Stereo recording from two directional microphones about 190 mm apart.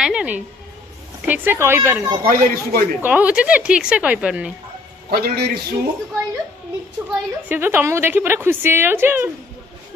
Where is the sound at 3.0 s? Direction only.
5° right (ahead or behind).